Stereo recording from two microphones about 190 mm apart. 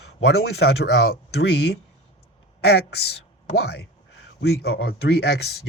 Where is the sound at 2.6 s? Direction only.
60° left (ahead or behind).